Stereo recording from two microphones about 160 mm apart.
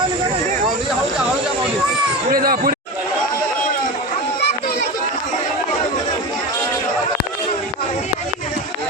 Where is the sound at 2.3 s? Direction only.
65° right (ahead or behind).